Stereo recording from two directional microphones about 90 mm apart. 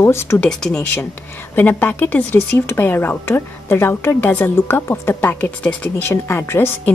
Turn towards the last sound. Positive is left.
turn(degrees=25)  # may be behind; listen again after turning